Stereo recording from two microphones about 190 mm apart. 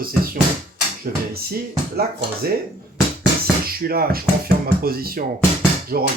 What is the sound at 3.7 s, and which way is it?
Speech, 50° right (ahead or behind).